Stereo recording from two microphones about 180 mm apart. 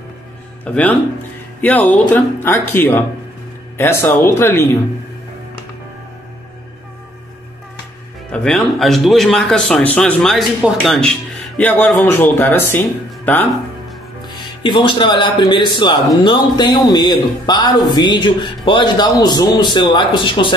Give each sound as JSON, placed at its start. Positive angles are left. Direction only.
{"t": 0.7, "sound": "speech", "side_deg": 5}
{"t": 8.3, "sound": "speech", "side_deg": 5}
{"t": 14.2, "sound": "speech", "side_deg": 25}